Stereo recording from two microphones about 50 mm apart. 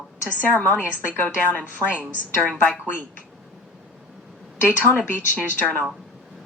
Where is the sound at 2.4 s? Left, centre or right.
Centre.